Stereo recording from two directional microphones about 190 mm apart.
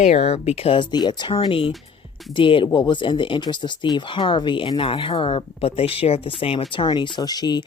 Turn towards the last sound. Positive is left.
turn(degrees=20)  # may be behind; listen again after turning